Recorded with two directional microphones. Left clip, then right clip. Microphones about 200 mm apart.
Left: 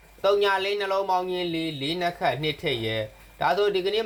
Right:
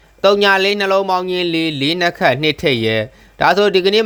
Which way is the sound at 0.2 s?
65° right (ahead or behind).